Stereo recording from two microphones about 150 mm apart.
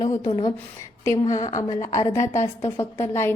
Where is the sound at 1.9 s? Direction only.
20° left (ahead or behind).